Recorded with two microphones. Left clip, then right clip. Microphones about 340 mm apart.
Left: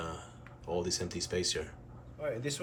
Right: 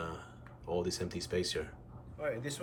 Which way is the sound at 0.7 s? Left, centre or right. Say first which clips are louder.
Left 1 dB; centre.